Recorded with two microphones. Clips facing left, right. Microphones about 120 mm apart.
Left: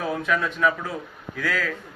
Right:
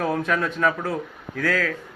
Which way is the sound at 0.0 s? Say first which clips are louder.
Right 2 dB; 50° right (ahead or behind).